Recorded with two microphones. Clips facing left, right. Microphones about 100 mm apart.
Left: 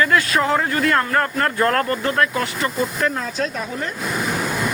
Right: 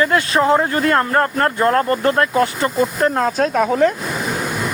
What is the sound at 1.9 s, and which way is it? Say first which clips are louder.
Speech: right 4 dB; 35° right (ahead or behind).